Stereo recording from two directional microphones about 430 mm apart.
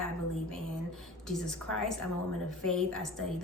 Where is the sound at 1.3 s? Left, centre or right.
Centre.